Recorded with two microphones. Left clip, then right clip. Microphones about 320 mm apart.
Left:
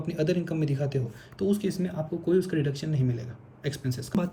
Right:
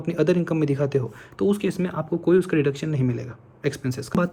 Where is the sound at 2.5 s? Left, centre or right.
Right.